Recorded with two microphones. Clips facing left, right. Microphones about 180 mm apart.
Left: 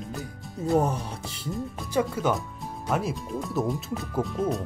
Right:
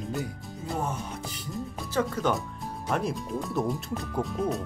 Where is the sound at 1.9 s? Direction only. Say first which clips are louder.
Left 2 dB; 10° left (ahead or behind).